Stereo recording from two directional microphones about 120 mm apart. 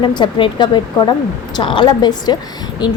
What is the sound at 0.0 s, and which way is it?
A woman's voice, 40° left (ahead or behind).